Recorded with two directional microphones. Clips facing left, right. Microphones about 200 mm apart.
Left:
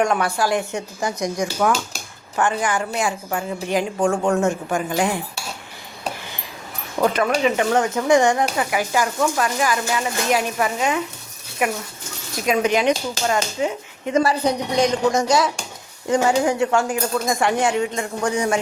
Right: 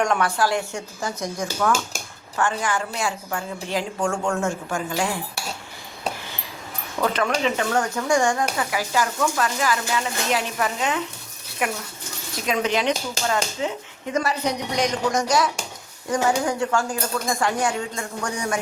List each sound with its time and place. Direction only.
0.0 s a woman's voice: 10° left (ahead or behind)
7.1 s a woman's voice: 10° left (ahead or behind)
7.8 s a woman's voice: 20° left (ahead or behind)
14.1 s speech: 30° left (ahead or behind)